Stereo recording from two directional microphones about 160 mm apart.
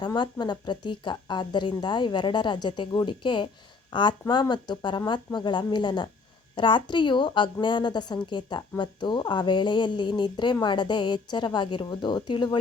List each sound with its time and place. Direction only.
0.0 s speech: 30° left (ahead or behind)